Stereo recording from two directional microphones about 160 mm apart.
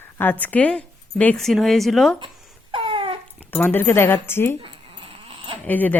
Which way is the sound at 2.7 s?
35° right (ahead or behind).